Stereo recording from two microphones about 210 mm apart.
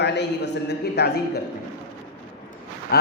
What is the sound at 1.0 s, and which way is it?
Speech, 50° left (ahead or behind).